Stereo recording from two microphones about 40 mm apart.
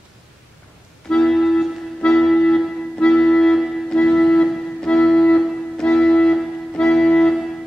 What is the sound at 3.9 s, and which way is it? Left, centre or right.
Music, left.